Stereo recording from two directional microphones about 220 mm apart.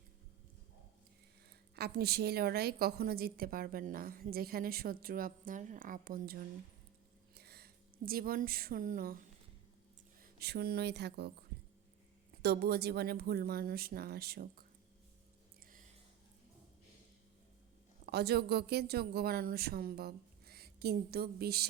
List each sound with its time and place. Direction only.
1.7 s a woman's voice: 45° right (ahead or behind)
12.4 s a woman's voice: 45° right (ahead or behind)
18.0 s a woman's voice: 45° right (ahead or behind)